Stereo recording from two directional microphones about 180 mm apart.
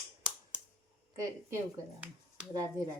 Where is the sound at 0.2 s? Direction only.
5° right (ahead or behind).